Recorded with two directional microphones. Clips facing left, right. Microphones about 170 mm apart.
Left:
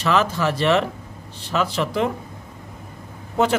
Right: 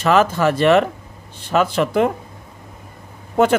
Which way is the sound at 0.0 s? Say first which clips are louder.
Right 5 dB; 50° right (ahead or behind).